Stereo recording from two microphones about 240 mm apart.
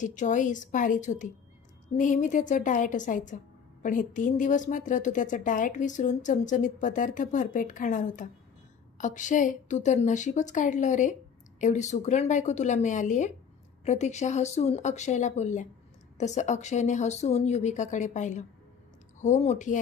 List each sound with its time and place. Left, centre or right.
0.0 s a woman's voice: left